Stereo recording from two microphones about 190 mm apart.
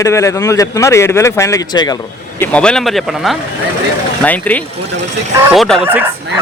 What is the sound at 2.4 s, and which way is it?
A man's voice, 5° left (ahead or behind).